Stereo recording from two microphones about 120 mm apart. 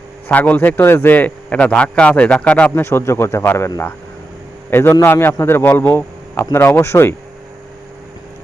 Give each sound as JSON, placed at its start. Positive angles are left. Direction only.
{"t": 0.3, "sound": "a man's voice", "side_deg": 15}
{"t": 4.7, "sound": "speech", "side_deg": 20}